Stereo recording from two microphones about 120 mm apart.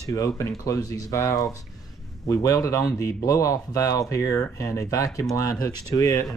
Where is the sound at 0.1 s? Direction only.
25° left (ahead or behind).